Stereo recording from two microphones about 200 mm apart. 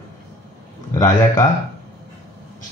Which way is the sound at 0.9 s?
20° left (ahead or behind).